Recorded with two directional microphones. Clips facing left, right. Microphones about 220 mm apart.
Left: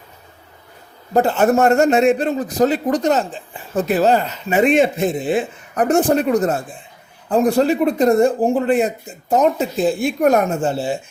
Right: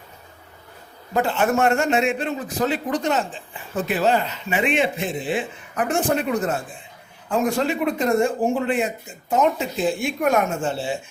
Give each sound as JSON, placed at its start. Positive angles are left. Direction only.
{"t": 1.1, "sound": "a man's voice", "side_deg": 40}